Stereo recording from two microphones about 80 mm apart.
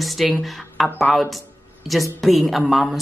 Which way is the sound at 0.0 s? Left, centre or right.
Centre.